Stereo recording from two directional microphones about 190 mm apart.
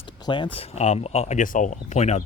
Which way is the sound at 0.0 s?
25° left (ahead or behind).